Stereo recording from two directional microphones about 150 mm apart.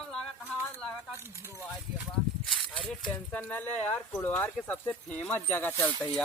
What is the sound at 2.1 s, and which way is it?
Speech, 5° left (ahead or behind).